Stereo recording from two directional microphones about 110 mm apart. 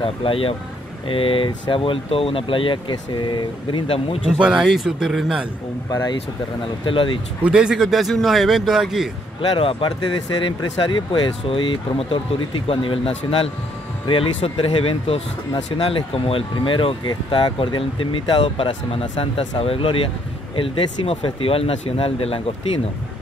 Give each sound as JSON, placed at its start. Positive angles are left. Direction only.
{"t": 0.0, "sound": "speech", "side_deg": 55}
{"t": 4.4, "sound": "speech", "side_deg": -10}
{"t": 6.8, "sound": "speech", "side_deg": 50}
{"t": 7.4, "sound": "a man's voice", "side_deg": -10}
{"t": 9.6, "sound": "speech", "side_deg": 55}